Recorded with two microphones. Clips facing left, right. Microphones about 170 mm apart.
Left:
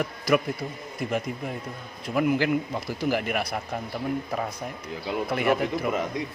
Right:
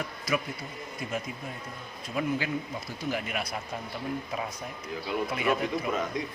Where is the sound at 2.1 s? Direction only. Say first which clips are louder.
Left 7 dB; 65° left (ahead or behind).